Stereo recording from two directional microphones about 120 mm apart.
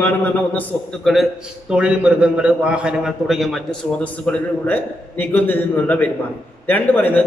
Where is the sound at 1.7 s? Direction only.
10° right (ahead or behind).